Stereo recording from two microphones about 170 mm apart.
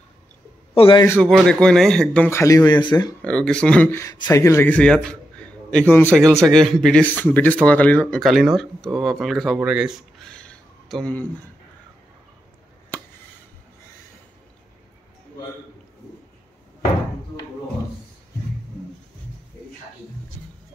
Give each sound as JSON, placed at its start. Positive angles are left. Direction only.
{"t": 0.7, "sound": "a man's voice", "side_deg": 30}
{"t": 1.0, "sound": "speech", "side_deg": 10}
{"t": 3.2, "sound": "speech", "side_deg": 5}
{"t": 4.1, "sound": "a man's voice", "side_deg": 20}
{"t": 12.9, "sound": "a sound", "side_deg": 10}